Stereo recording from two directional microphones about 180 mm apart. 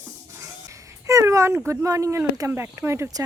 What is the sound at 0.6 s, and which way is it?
Speech, 15° right (ahead or behind).